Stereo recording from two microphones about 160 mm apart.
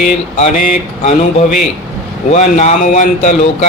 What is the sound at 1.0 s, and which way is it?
Speech, 50° left (ahead or behind).